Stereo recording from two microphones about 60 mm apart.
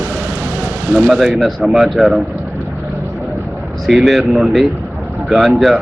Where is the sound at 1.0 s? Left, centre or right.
Centre.